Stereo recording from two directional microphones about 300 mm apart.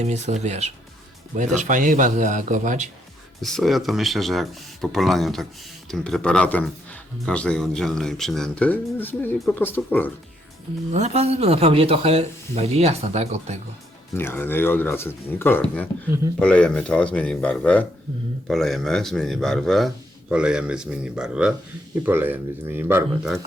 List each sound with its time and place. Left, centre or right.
0.0 s speech: right
3.4 s speech: centre
10.9 s speech: right
14.2 s speech: centre